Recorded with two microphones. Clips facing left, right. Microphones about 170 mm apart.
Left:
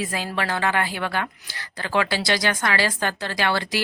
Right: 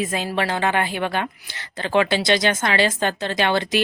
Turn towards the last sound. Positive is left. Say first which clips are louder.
# right 4 dB
turn(degrees=-20)  # may be behind; listen again after turning